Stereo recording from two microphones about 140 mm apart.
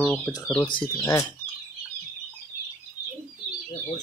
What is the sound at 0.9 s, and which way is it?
Speech, 25° left (ahead or behind).